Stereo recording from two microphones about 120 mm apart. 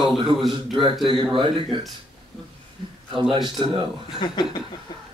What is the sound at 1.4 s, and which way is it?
Speech, 40° right (ahead or behind).